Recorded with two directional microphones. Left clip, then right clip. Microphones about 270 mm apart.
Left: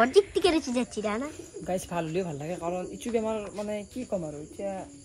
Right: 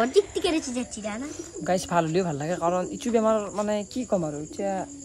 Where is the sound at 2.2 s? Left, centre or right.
Right.